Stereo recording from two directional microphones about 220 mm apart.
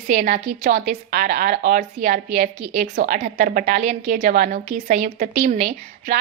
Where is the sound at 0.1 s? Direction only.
40° right (ahead or behind).